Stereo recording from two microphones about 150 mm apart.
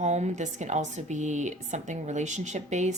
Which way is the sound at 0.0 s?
50° right (ahead or behind).